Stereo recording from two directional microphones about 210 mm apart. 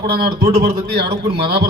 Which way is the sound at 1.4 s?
50° right (ahead or behind).